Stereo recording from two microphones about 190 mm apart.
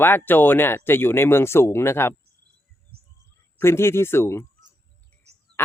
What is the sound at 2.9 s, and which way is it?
Chirp, 55° right (ahead or behind).